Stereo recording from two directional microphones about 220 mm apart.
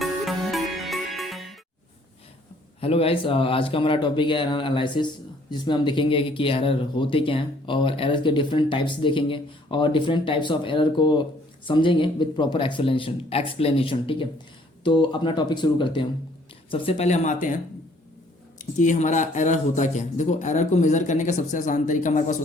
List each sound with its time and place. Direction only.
0.0 s music: centre (ahead or behind)
2.8 s speech: 25° left (ahead or behind)
18.6 s speech: 35° left (ahead or behind)